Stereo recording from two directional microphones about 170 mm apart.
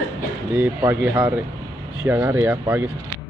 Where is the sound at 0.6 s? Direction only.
10° right (ahead or behind).